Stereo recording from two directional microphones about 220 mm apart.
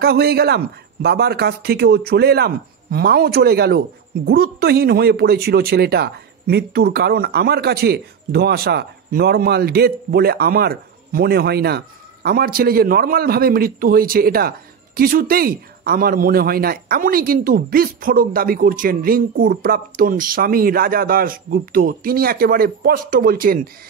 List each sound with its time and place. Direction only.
0.0 s speech: 45° right (ahead or behind)